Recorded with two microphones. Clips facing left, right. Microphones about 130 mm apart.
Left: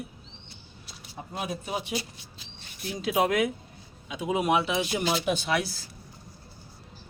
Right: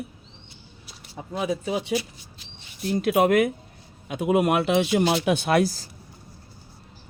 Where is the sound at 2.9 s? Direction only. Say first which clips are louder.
Right 6 dB; 55° right (ahead or behind).